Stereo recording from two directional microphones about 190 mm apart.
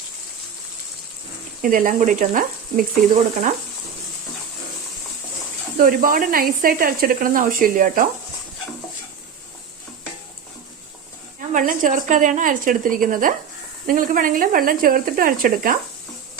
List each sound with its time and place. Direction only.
1.6 s speech: 45° right (ahead or behind)
5.7 s speech: 45° right (ahead or behind)
11.5 s speech: 45° right (ahead or behind)